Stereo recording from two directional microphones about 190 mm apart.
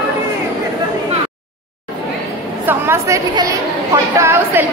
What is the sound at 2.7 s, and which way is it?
A woman's voice, 15° right (ahead or behind).